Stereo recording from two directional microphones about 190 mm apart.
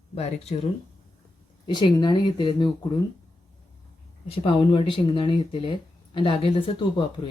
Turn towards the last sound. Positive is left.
turn(degrees=25)  # may be behind; listen again after turning